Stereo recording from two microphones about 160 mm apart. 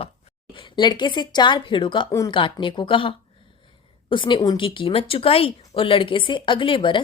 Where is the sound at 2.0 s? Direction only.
20° left (ahead or behind).